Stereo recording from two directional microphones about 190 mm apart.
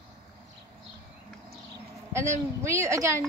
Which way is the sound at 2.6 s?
15° right (ahead or behind).